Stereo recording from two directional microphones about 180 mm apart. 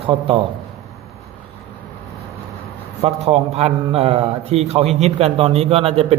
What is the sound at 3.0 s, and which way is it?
A man's voice, 35° right (ahead or behind).